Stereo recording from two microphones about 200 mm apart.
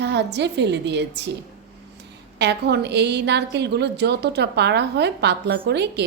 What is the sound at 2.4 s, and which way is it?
A woman's voice, 55° right (ahead or behind).